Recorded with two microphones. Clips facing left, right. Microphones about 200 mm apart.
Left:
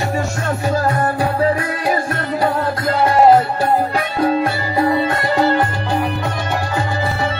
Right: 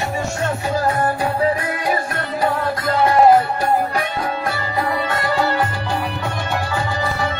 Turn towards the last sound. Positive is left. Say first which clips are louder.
# left 3 dB
turn(degrees=20)  # may be behind; listen again after turning